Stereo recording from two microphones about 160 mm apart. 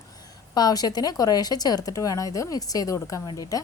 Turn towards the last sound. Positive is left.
turn(degrees=20)  # may be behind; listen again after turning